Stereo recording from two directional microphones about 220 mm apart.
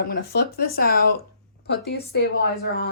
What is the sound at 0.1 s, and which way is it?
Speech, 45° left (ahead or behind).